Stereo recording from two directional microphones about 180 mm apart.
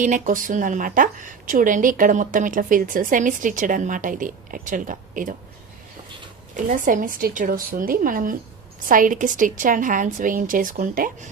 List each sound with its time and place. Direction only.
0.0 s a woman's voice: 45° right (ahead or behind)
6.7 s a woman's voice: 45° right (ahead or behind)